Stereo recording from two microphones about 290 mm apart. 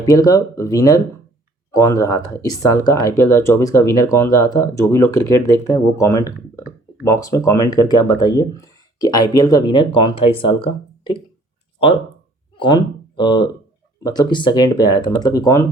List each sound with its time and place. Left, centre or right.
0.0 s speech: centre
6.2 s speech: centre
7.0 s speech: centre
12.5 s speech: centre